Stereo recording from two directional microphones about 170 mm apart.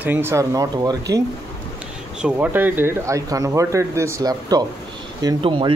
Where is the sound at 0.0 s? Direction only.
15° right (ahead or behind).